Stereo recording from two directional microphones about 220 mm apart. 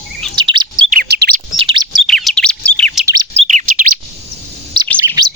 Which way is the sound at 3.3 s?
35° right (ahead or behind).